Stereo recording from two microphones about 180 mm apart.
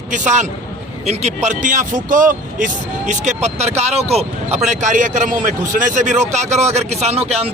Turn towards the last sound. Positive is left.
turn(degrees=-35)  # may be behind; listen again after turning